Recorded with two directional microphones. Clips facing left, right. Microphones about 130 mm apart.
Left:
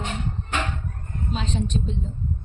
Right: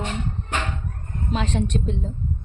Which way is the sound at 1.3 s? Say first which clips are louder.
Right 3 dB; 65° right (ahead or behind).